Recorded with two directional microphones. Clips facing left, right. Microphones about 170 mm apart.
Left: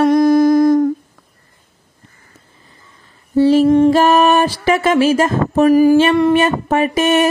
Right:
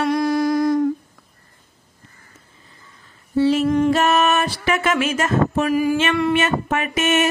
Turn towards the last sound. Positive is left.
turn(degrees=35)  # may be behind; listen again after turning